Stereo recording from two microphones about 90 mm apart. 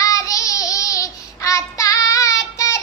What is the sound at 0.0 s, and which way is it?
Child singing, 40° left (ahead or behind).